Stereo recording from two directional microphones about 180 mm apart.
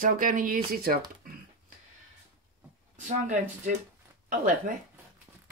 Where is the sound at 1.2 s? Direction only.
55° right (ahead or behind).